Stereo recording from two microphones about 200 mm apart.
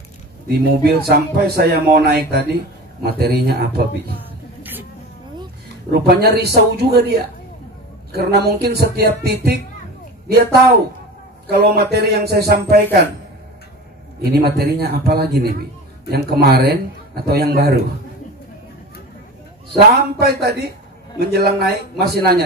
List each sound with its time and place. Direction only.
0.5 s speech: 50° right (ahead or behind)
6.0 s speech: 55° right (ahead or behind)
11.4 s speech: 55° right (ahead or behind)
14.2 s speech: 50° right (ahead or behind)
19.7 s speech: 50° right (ahead or behind)